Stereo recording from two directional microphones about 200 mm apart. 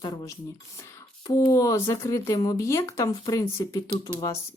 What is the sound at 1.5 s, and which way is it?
Speech, 15° left (ahead or behind).